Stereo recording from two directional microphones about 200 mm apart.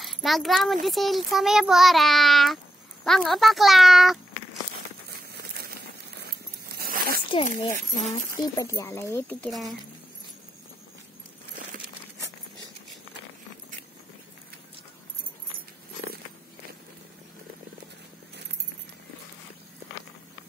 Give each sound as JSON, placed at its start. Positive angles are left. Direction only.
{"t": 0.0, "sound": "a child's voice", "side_deg": 0}
{"t": 6.2, "sound": "zipper", "side_deg": -50}
{"t": 7.4, "sound": "speech", "side_deg": 40}
{"t": 8.5, "sound": "speech", "side_deg": 15}